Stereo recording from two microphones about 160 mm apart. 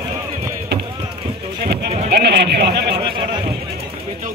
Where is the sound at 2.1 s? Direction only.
90° right.